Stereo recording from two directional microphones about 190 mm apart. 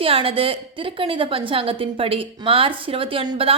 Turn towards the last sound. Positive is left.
turn(degrees=-30)  # may be behind; listen again after turning